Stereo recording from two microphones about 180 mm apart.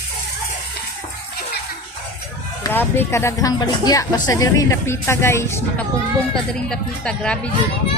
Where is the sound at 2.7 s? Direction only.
10° left (ahead or behind).